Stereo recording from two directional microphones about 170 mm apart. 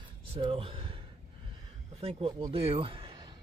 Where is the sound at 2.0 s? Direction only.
35° right (ahead or behind).